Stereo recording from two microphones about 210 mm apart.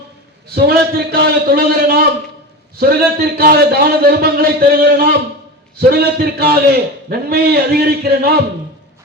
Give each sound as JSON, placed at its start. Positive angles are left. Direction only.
{"t": 0.5, "sound": "a man's voice", "side_deg": -50}